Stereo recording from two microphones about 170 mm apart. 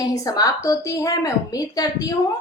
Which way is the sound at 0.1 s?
20° left (ahead or behind).